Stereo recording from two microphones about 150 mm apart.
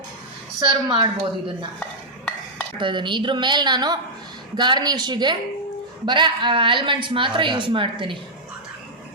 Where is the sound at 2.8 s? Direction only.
30° right (ahead or behind).